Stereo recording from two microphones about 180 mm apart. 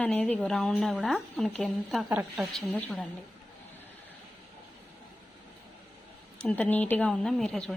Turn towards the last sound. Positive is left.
turn(degrees=5)  # may be behind; listen again after turning